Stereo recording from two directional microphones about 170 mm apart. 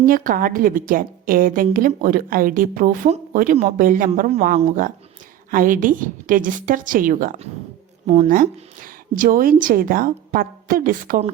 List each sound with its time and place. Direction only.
0.0 s a woman's voice: 55° right (ahead or behind)